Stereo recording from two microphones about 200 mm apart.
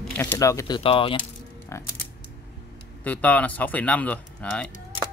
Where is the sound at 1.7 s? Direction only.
15° left (ahead or behind).